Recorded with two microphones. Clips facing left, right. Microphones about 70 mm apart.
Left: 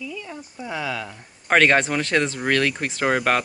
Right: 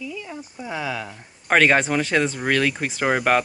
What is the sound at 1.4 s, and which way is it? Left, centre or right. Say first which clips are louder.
Speech: even; centre.